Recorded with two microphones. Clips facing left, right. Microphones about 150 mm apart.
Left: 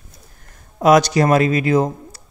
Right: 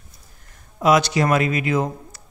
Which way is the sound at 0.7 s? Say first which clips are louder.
Left 4 dB; 40° left (ahead or behind).